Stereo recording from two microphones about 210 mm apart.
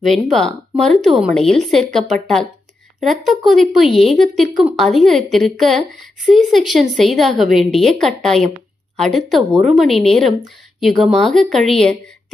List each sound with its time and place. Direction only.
0.0 s speech: centre (ahead or behind)